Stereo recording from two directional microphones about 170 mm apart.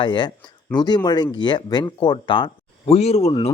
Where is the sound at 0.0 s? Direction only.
25° left (ahead or behind).